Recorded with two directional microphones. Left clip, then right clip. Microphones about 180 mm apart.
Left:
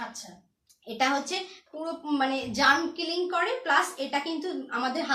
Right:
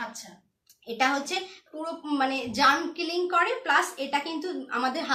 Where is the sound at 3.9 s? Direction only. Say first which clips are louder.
Right 1 dB; 20° right (ahead or behind).